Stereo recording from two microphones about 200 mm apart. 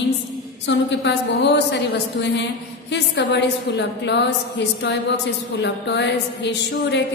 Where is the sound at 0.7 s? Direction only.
60° left (ahead or behind).